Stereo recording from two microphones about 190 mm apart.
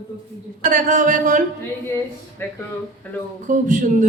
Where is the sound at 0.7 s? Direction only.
45° right (ahead or behind).